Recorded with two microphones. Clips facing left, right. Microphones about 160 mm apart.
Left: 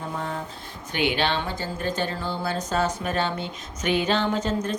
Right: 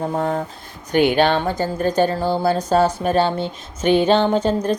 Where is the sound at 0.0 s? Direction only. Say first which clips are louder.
Right 9 dB; 45° right (ahead or behind).